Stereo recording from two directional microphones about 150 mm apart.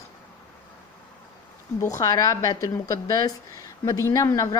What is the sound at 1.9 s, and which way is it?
A woman's voice, 25° left (ahead or behind).